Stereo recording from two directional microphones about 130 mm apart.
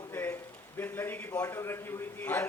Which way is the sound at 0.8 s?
15° left (ahead or behind).